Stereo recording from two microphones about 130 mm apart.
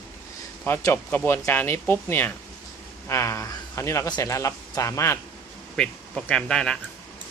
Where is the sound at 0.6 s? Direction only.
15° left (ahead or behind).